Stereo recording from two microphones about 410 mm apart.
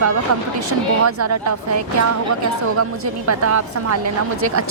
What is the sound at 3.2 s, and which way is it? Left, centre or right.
A woman's voice, right.